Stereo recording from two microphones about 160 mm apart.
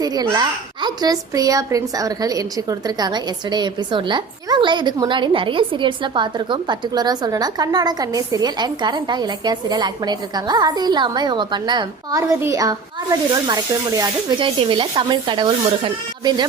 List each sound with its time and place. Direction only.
0.0 s a child's voice: 25° right (ahead or behind)